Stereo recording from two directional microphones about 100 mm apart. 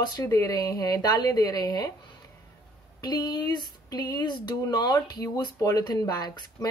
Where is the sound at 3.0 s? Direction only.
40° left (ahead or behind).